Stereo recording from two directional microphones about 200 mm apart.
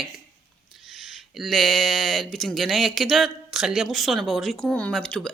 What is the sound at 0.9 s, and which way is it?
Speech, centre (ahead or behind).